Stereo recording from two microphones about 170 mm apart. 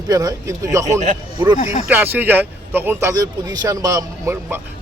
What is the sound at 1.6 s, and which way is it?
Speech, 40° left (ahead or behind).